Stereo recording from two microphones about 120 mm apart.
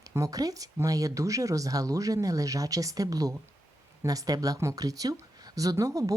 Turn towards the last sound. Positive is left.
turn(degrees=-30)  # may be behind; listen again after turning